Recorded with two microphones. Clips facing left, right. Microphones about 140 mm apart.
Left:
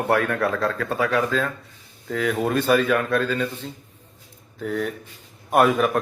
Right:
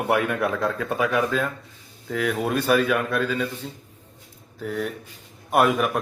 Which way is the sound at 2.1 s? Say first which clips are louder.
Left 1 dB; centre (ahead or behind).